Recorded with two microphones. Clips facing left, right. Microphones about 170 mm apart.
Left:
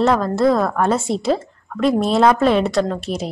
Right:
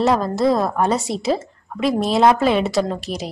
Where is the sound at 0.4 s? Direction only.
15° right (ahead or behind).